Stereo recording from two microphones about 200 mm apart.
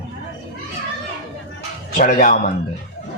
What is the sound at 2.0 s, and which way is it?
Speech, 45° left (ahead or behind).